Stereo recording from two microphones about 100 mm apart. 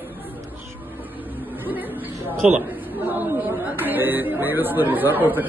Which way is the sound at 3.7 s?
20° right (ahead or behind).